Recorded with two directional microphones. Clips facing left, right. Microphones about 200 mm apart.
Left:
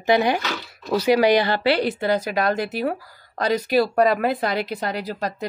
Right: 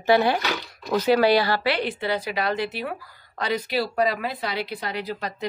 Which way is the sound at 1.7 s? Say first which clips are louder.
Left 5 dB; 40° left (ahead or behind).